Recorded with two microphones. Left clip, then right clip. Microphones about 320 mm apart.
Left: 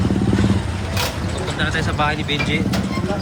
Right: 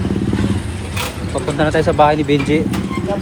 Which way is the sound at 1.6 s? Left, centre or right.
Centre.